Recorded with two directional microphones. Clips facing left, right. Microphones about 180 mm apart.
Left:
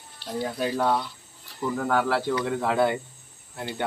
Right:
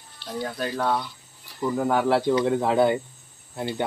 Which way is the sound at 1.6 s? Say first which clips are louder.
Right 2 dB; 15° right (ahead or behind).